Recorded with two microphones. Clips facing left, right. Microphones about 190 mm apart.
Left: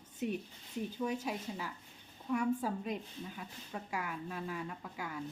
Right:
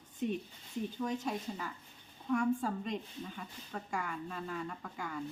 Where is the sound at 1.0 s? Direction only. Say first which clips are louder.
Right 1 dB; 5° left (ahead or behind).